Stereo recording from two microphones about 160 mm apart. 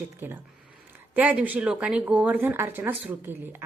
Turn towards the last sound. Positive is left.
turn(degrees=-15)  # may be behind; listen again after turning